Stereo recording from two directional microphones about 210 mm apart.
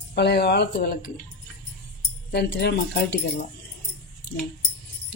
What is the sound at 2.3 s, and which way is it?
Speech, 50° left (ahead or behind).